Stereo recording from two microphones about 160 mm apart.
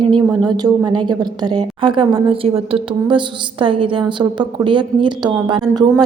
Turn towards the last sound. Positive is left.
turn(degrees=-25)  # may be behind; listen again after turning